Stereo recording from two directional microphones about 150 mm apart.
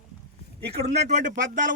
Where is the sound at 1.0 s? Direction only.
55° right (ahead or behind).